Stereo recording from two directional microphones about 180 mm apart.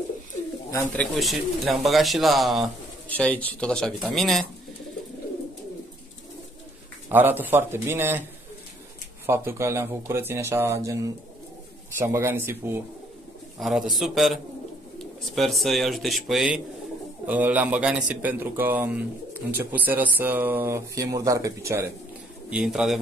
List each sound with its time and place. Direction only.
0.7 s speech: 15° left (ahead or behind)
1.1 s speech: centre (ahead or behind)
7.1 s speech: 10° right (ahead or behind)
9.2 s speech: 15° right (ahead or behind)
13.6 s speech: centre (ahead or behind)
22.5 s speech: 5° right (ahead or behind)